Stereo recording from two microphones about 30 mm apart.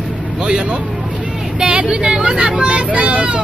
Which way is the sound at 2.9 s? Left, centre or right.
Right.